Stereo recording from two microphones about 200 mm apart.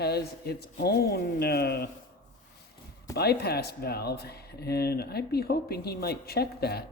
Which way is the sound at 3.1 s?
55° left (ahead or behind).